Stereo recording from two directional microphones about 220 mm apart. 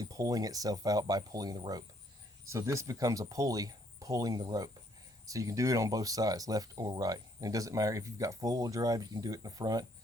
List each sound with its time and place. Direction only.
0.0 s speech: 15° right (ahead or behind)